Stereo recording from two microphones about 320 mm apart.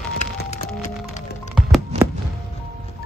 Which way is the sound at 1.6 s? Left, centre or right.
Centre.